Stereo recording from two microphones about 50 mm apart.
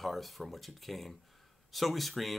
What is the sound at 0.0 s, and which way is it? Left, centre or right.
Speech, centre.